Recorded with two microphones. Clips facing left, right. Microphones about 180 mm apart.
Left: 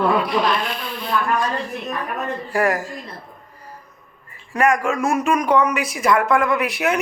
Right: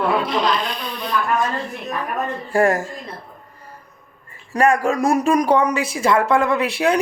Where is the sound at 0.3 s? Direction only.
20° right (ahead or behind).